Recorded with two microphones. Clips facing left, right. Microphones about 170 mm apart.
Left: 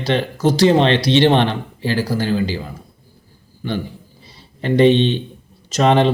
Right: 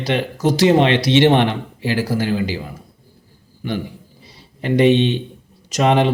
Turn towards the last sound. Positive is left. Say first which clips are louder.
# left 1 dB
turn(degrees=-10)  # may be behind; listen again after turning